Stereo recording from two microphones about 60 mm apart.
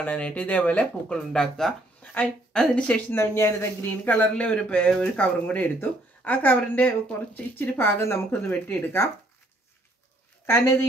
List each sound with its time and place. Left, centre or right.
0.0 s speech: left
1.1 s speech: centre
2.0 s speech: left
3.1 s speech: left
3.9 s speech: left
7.6 s speech: left
8.5 s speech: left
10.4 s a woman's voice: left